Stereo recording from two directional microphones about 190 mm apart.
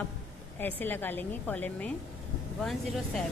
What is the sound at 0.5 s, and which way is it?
A woman's voice, 10° left (ahead or behind).